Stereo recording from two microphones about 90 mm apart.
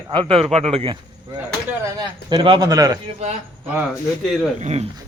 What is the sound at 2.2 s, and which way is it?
Speech, 65° right (ahead or behind).